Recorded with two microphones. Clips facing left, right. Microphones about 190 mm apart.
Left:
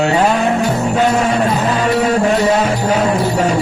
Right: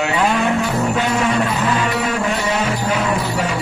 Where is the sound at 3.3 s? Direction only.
45° left (ahead or behind).